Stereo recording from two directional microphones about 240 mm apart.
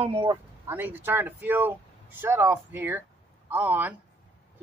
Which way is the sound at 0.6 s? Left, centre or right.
Centre.